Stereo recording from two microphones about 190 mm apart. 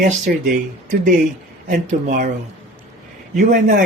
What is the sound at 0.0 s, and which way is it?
Speech, 45° right (ahead or behind).